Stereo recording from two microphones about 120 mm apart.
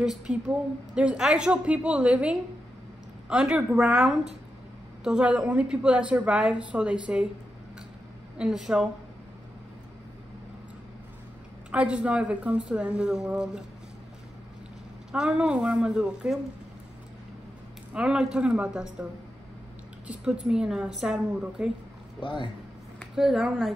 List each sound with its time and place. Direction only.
0.0 s a woman's voice: 5° right (ahead or behind)
8.4 s speech: 5° right (ahead or behind)
11.7 s a woman's voice: 10° right (ahead or behind)
15.1 s a woman's voice: 5° right (ahead or behind)
17.9 s a woman's voice: 5° right (ahead or behind)
20.1 s a woman's voice: 5° right (ahead or behind)
22.2 s speech: 45° left (ahead or behind)
23.1 s speech: 5° right (ahead or behind)